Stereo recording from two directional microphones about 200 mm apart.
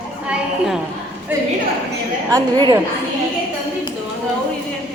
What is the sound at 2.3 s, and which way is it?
Speech, 15° right (ahead or behind).